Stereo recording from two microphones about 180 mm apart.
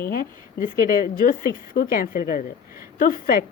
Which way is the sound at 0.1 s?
55° left (ahead or behind).